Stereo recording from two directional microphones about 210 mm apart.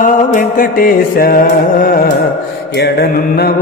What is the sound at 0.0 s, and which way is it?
Music, 40° left (ahead or behind).